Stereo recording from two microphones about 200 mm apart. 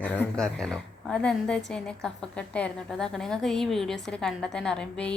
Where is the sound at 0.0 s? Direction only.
10° left (ahead or behind).